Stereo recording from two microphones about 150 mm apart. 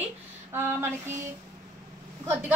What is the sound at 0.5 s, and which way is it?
Speech, 15° right (ahead or behind).